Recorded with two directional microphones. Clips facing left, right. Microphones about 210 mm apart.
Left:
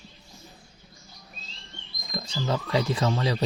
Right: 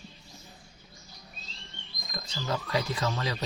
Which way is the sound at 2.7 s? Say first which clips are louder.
Left 6 dB; 25° left (ahead or behind).